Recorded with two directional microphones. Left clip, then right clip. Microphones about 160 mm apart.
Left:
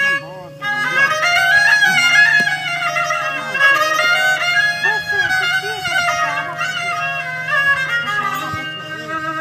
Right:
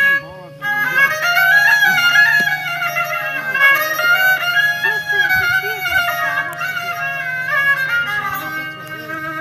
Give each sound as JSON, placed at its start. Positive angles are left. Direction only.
{"t": 0.7, "sound": "music", "side_deg": 20}